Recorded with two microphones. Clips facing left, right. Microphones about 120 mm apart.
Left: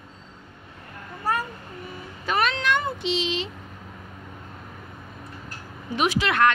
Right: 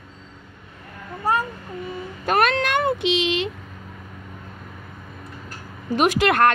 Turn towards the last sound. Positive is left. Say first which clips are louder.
# right 4 dB
turn(degrees=-50)  # may be behind; listen again after turning